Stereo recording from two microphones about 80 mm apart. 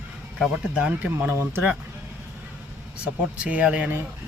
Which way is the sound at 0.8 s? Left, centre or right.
Centre.